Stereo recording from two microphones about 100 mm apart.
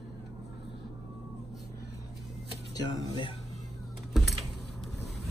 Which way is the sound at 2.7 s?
40° left (ahead or behind).